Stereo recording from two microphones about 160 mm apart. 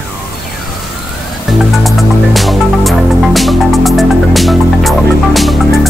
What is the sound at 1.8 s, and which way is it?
Music, centre (ahead or behind).